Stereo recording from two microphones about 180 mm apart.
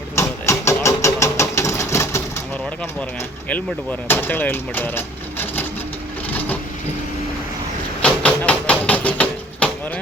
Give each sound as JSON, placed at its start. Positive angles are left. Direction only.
{"t": 0.2, "sound": "sewing machine", "side_deg": 15}
{"t": 4.1, "sound": "speech", "side_deg": 10}
{"t": 8.0, "sound": "a sound", "side_deg": 5}